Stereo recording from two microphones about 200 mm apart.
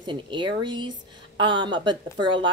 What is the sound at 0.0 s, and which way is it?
A woman's voice, 25° right (ahead or behind).